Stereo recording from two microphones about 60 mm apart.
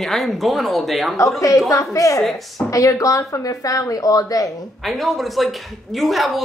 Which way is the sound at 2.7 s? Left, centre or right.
Left.